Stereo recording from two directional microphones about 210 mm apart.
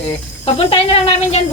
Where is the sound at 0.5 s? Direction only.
25° left (ahead or behind).